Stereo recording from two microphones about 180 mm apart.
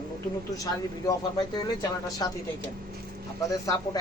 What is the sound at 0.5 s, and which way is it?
Speech, 20° left (ahead or behind).